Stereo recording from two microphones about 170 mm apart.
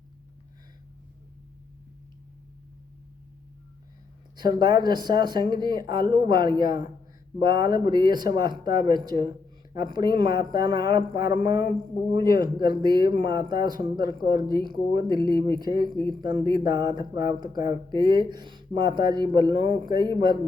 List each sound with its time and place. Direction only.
4.4 s speech: 25° right (ahead or behind)